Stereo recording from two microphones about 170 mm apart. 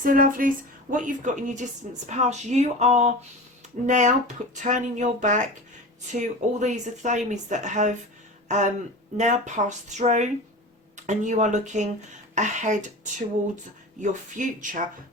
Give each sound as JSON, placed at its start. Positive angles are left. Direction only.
{"t": 0.0, "sound": "speech", "side_deg": -55}
{"t": 9.1, "sound": "speech", "side_deg": -45}